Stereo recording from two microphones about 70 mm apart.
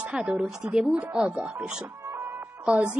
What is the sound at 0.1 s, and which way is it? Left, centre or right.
A woman's voice, centre.